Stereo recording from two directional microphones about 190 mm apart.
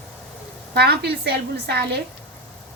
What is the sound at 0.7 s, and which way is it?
A woman's voice, 60° right (ahead or behind).